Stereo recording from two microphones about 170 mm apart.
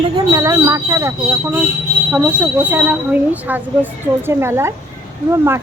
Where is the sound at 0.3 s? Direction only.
20° right (ahead or behind).